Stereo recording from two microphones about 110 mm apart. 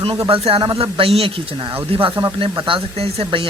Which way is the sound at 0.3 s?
55° right (ahead or behind).